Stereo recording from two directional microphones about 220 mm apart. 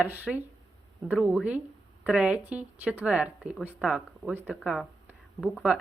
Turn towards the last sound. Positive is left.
turn(degrees=0)  # may be behind; listen again after turning